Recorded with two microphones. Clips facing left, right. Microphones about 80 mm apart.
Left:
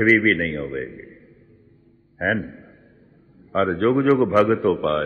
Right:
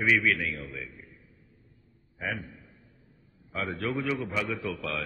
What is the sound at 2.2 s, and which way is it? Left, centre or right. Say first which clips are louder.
A man's voice: left 12 dB; left.